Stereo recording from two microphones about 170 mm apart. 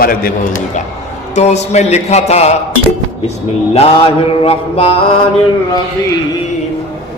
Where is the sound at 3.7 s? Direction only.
35° left (ahead or behind).